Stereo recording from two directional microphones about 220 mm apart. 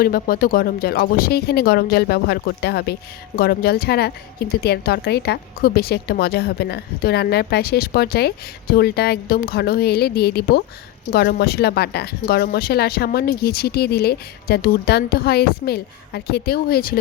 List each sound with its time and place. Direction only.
0.0 s speech: 40° left (ahead or behind)